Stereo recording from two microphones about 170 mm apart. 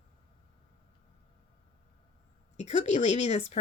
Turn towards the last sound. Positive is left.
turn(degrees=40)  # may be behind; listen again after turning